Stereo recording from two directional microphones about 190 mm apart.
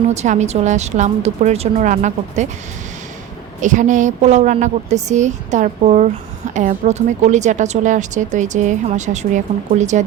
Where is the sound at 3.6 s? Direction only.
40° right (ahead or behind).